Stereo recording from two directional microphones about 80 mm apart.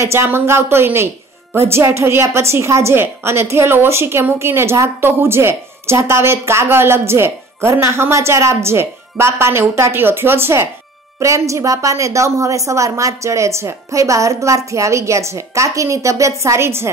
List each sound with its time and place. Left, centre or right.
0.0 s speech: right